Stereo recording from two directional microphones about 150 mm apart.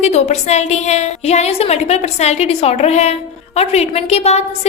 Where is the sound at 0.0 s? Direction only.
50° left (ahead or behind).